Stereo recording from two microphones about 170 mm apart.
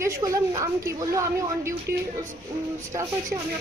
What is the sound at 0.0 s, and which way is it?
Speech, 20° right (ahead or behind).